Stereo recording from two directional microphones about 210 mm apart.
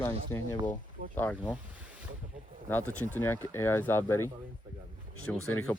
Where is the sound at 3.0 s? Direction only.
10° left (ahead or behind).